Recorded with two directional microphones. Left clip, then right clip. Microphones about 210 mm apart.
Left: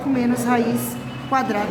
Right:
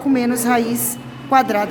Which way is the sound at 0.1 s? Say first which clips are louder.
Right 3 dB; 45° right (ahead or behind).